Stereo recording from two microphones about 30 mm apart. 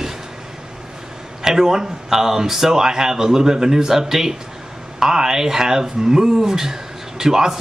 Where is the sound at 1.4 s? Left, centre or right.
Centre.